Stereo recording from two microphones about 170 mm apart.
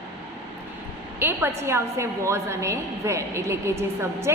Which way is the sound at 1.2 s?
15° right (ahead or behind).